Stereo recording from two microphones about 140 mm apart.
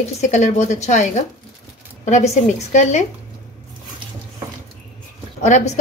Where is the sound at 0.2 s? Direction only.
55° left (ahead or behind).